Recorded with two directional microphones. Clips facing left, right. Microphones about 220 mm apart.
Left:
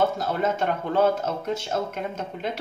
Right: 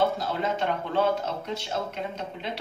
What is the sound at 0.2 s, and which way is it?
Speech, 45° left (ahead or behind).